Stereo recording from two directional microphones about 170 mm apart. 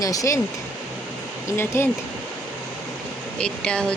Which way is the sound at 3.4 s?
5° left (ahead or behind).